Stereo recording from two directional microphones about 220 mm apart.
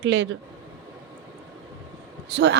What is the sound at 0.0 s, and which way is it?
Speech, 55° right (ahead or behind).